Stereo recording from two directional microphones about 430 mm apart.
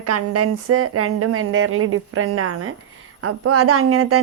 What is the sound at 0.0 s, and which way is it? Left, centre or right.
Speech, right.